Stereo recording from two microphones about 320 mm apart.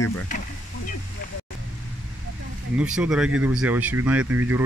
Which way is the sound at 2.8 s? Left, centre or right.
Centre.